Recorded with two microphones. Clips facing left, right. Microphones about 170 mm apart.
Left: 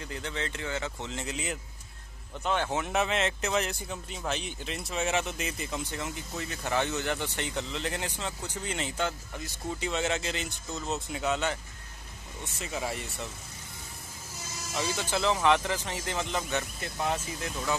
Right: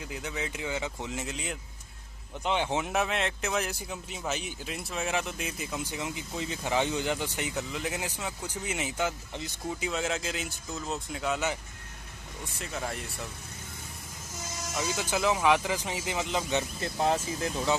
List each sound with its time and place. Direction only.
0.0 s speech: 5° right (ahead or behind)
1.2 s speech: centre (ahead or behind)
2.4 s speech: 15° right (ahead or behind)
2.9 s speech: centre (ahead or behind)
12.5 s speech: centre (ahead or behind)
14.8 s speech: 10° right (ahead or behind)
16.8 s speech: 30° right (ahead or behind)